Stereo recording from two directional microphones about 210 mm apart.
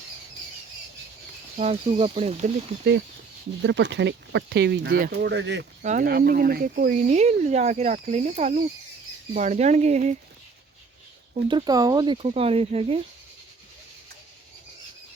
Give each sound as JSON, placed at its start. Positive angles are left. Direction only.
{"t": 1.5, "sound": "speech", "side_deg": -30}
{"t": 3.6, "sound": "speech", "side_deg": -55}
{"t": 5.8, "sound": "speech", "side_deg": -35}
{"t": 11.4, "sound": "speech", "side_deg": -20}